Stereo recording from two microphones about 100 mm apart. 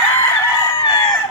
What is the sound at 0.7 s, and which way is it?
Chicken, 50° left (ahead or behind).